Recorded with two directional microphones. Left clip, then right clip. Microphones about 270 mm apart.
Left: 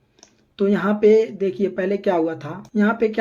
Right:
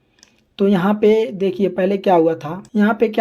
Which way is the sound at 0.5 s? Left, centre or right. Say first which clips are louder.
Right 3 dB; centre.